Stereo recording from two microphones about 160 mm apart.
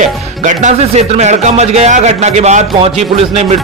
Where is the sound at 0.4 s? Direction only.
45° right (ahead or behind).